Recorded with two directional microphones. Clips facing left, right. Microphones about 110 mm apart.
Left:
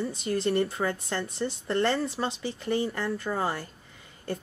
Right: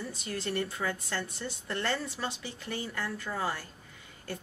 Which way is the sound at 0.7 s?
45° left (ahead or behind).